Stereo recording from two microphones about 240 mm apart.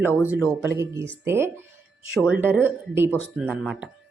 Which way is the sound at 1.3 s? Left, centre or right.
Centre.